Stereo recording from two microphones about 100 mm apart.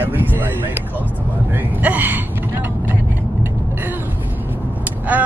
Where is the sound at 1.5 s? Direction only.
20° right (ahead or behind).